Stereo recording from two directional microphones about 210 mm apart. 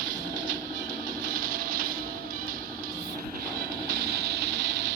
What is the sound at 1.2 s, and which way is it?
Music, 45° right (ahead or behind).